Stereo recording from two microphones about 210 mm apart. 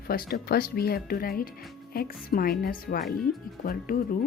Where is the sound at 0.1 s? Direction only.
45° left (ahead or behind).